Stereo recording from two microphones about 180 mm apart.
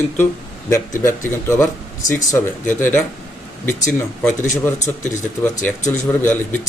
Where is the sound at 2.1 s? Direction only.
15° left (ahead or behind).